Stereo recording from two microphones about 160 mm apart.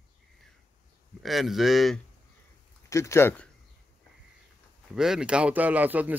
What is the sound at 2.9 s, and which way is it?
Speech, 20° left (ahead or behind).